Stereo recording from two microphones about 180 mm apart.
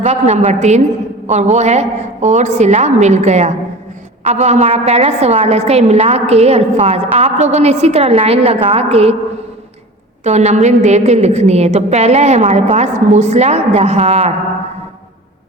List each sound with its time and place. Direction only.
0.0 s a woman's voice: 40° right (ahead or behind)
10.2 s a woman's voice: 40° right (ahead or behind)